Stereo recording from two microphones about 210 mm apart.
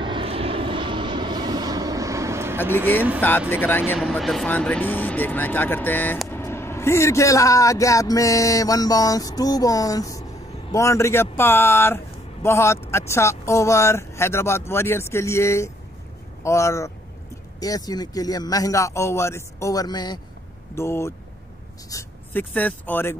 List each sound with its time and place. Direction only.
0.0 s vehicle: 25° right (ahead or behind)
3.2 s speech: 10° left (ahead or behind)